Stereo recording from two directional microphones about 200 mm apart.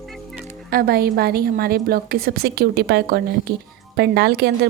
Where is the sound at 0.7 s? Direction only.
50° right (ahead or behind).